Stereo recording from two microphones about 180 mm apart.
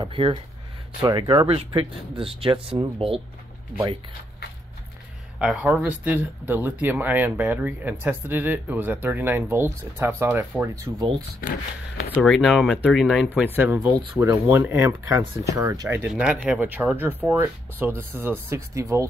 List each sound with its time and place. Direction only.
0.0 s speech: 30° right (ahead or behind)
5.4 s speech: 5° right (ahead or behind)
12.2 s speech: centre (ahead or behind); by 19.0 s 15° right (ahead or behind)